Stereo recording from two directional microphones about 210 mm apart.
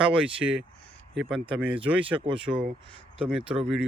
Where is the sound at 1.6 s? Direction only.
5° right (ahead or behind).